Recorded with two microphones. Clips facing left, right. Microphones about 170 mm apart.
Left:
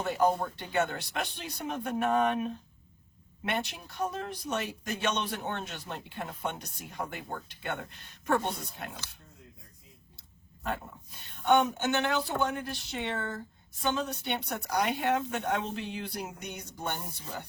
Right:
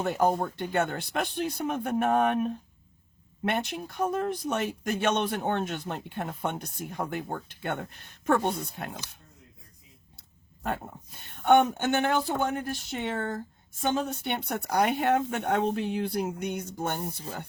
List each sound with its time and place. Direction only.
0.0 s speech: 50° right (ahead or behind)
3.5 s speech: 50° right (ahead or behind)
10.6 s speech: 50° right (ahead or behind)